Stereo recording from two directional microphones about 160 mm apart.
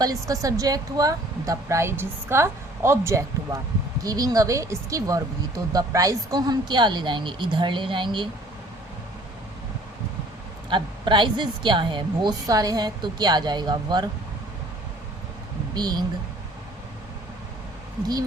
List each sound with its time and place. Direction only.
0.0 s a woman's voice: 20° right (ahead or behind)
10.7 s a woman's voice: 30° right (ahead or behind)
15.7 s a woman's voice: 25° right (ahead or behind)